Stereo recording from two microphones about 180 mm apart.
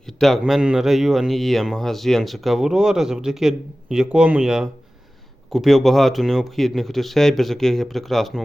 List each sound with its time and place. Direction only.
0.2 s speech: centre (ahead or behind)